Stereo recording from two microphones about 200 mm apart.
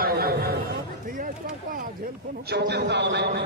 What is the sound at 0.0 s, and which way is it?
Chatter, 50° right (ahead or behind).